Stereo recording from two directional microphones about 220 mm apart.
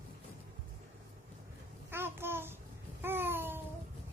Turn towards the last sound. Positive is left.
turn(degrees=-10)  # may be behind; listen again after turning